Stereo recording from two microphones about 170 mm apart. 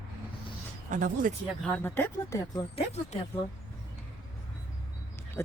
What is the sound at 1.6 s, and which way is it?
Speech, 15° left (ahead or behind).